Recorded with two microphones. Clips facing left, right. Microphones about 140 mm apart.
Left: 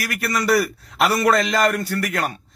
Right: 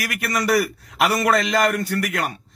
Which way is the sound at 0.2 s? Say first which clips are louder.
Left 1 dB; 15° right (ahead or behind).